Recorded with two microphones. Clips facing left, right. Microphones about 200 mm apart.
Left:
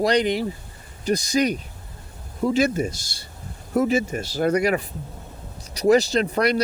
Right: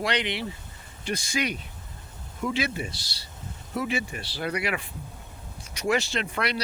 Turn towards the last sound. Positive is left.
turn(degrees=40)  # may be behind; listen again after turning